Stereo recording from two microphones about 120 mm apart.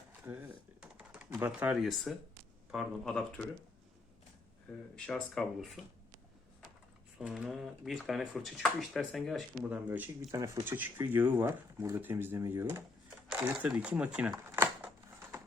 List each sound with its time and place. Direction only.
0.3 s typing: 15° right (ahead or behind)
1.5 s speech: 10° right (ahead or behind)
4.9 s speech: 10° left (ahead or behind)
7.2 s speech: 5° right (ahead or behind)
9.6 s speech: 15° right (ahead or behind)
10.2 s speech: 25° right (ahead or behind); by 14.3 s 10° right (ahead or behind)
14.4 s a sound: 20° right (ahead or behind)